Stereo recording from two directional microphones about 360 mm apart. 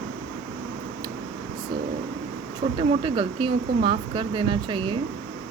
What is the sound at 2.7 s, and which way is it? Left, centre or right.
Speech, centre.